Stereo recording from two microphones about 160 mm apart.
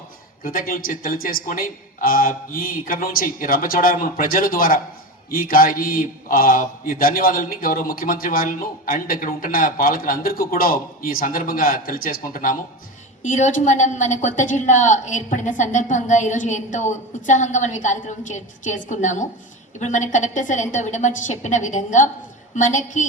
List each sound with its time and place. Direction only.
0.4 s a man's voice: 60° left (ahead or behind)